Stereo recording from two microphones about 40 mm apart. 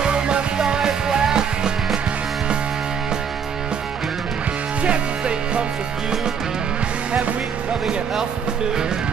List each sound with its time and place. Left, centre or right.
0.0 s music: right
4.8 s music: right